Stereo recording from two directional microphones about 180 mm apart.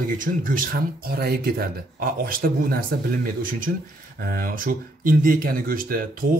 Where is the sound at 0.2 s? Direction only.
50° right (ahead or behind).